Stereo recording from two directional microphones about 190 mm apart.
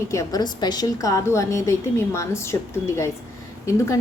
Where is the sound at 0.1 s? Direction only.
15° left (ahead or behind).